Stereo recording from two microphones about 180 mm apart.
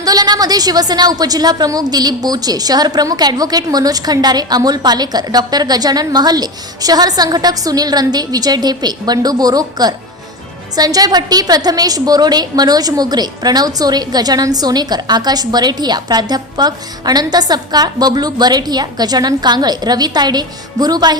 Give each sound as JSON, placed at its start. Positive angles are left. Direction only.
{"t": 0.0, "sound": "a woman's voice", "side_deg": -20}